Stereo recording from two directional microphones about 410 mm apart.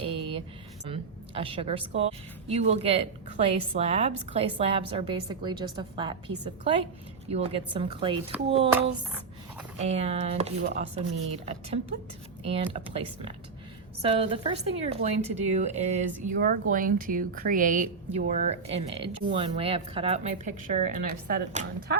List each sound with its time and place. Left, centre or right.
0.0 s a sound: centre
0.9 s a woman's voice: centre
12.7 s a woman's voice: centre